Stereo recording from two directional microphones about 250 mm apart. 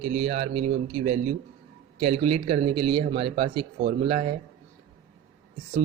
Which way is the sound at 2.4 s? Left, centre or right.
Right.